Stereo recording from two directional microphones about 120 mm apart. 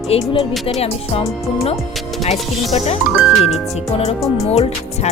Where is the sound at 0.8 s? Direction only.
60° left (ahead or behind).